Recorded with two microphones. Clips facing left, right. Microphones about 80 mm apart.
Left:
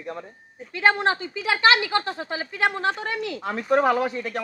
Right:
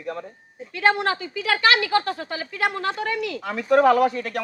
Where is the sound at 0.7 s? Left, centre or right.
Left.